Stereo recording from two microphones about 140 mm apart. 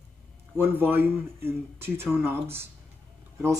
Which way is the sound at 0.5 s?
15° right (ahead or behind).